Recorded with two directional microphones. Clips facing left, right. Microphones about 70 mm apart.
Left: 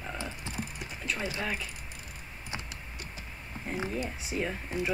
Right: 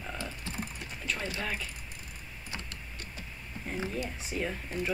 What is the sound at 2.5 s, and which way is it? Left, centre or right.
Computer keyboard, centre.